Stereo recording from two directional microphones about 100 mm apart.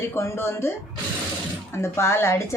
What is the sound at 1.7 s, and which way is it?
Speech, 25° left (ahead or behind).